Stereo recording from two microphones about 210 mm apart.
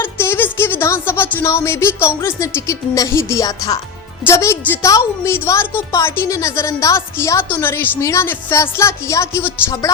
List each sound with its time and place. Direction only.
0.0 s music: 10° left (ahead or behind)
2.6 s a woman's voice: 15° left (ahead or behind)